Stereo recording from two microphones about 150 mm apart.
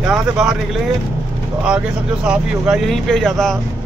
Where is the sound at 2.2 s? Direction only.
5° right (ahead or behind).